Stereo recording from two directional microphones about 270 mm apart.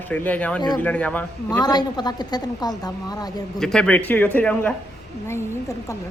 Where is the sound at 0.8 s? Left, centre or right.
Centre.